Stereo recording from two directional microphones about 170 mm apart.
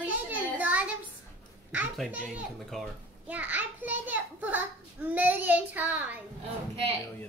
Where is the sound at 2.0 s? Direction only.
5° right (ahead or behind).